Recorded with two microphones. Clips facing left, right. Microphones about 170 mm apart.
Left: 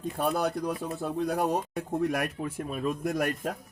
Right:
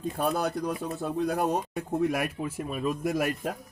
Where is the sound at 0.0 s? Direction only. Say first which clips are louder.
Even; centre (ahead or behind).